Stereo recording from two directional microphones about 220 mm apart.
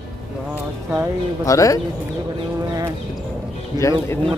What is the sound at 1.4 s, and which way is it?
Speech, 15° left (ahead or behind).